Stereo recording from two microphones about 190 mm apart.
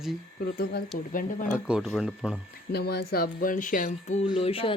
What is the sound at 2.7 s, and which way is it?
Speech, 60° left (ahead or behind).